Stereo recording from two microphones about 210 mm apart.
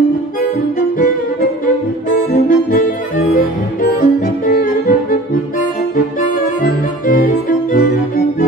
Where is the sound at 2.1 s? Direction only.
40° left (ahead or behind).